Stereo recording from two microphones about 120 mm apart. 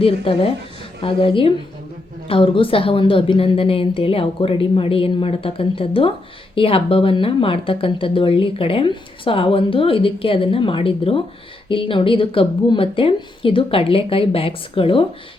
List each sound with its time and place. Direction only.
0.0 s speech: 50° left (ahead or behind)